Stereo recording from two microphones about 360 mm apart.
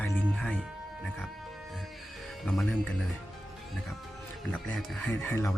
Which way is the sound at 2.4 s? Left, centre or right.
Centre.